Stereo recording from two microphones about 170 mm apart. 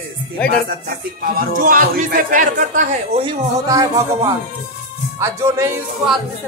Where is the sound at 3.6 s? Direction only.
20° right (ahead or behind).